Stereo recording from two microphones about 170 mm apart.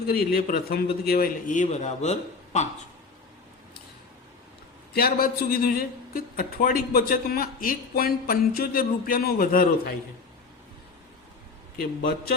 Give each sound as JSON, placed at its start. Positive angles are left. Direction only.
{"t": 0.1, "sound": "a man's voice", "side_deg": 60}
{"t": 4.9, "sound": "a man's voice", "side_deg": 60}
{"t": 11.8, "sound": "a man's voice", "side_deg": 65}